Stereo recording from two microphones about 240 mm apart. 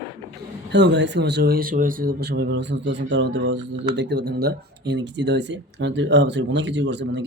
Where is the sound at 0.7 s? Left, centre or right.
Right.